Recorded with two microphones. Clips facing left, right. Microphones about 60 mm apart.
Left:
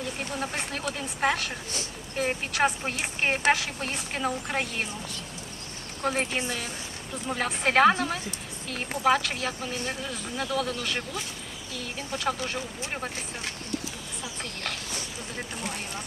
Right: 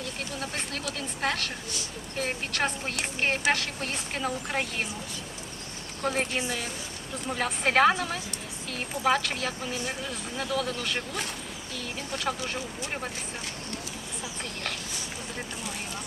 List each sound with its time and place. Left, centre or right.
0.3 s speech: centre
6.0 s speech: centre